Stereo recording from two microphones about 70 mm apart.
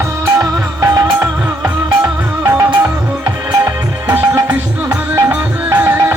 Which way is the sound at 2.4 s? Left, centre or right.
Right.